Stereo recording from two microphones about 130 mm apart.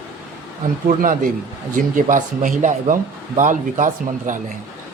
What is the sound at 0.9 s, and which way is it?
Speech, 90° right.